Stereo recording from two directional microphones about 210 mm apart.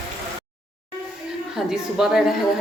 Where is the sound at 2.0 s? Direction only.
5° right (ahead or behind).